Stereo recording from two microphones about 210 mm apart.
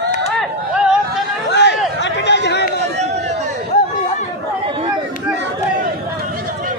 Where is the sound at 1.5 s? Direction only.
55° left (ahead or behind).